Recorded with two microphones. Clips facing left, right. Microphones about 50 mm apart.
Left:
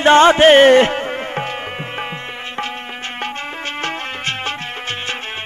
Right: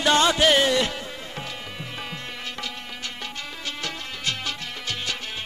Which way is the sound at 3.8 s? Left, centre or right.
Left.